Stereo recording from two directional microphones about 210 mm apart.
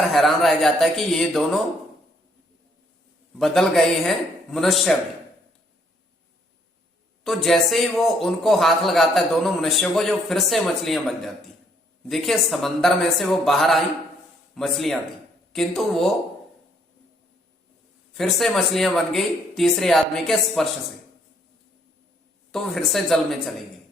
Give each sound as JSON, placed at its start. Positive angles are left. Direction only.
{"t": 0.1, "sound": "a man's voice", "side_deg": 0}
{"t": 3.3, "sound": "a man's voice", "side_deg": 0}
{"t": 7.3, "sound": "a man's voice", "side_deg": 0}
{"t": 12.0, "sound": "a man's voice", "side_deg": 0}
{"t": 18.2, "sound": "a man's voice", "side_deg": 0}
{"t": 22.5, "sound": "a man's voice", "side_deg": 0}